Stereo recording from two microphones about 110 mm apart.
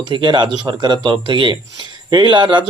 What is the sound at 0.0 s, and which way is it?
Speech, 45° right (ahead or behind).